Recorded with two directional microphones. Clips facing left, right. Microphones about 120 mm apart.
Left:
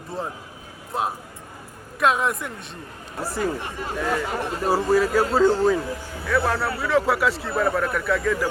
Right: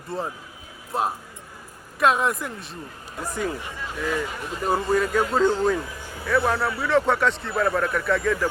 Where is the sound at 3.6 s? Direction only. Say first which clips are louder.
Left 3 dB; 50° left (ahead or behind).